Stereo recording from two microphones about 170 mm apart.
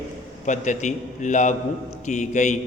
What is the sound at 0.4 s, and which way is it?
A man's voice, 45° left (ahead or behind).